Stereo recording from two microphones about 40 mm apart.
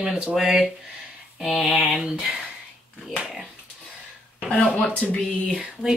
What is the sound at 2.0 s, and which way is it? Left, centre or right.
Speech, right.